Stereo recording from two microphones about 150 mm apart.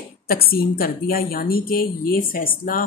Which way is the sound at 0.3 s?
80° left.